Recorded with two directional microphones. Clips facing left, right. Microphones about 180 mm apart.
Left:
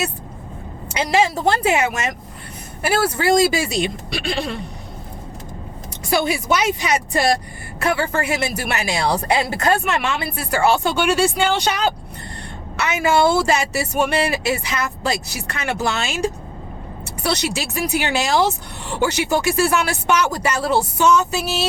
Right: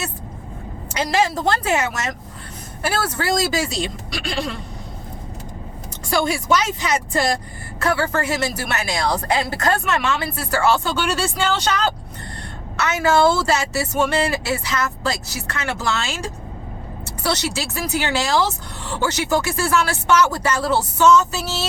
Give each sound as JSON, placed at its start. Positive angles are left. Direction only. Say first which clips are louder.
{"t": 0.9, "sound": "speech", "louder": "left 2 dB", "side_deg": 10}
{"t": 6.1, "sound": "speech", "louder": "even", "side_deg": 10}